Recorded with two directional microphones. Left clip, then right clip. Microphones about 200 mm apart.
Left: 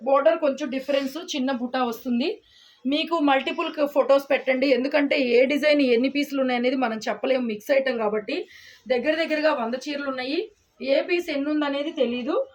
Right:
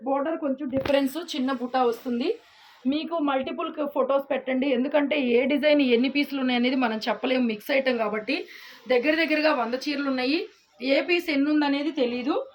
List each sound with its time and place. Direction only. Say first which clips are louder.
0.1 s a woman's voice: left 7 dB; 25° left (ahead or behind)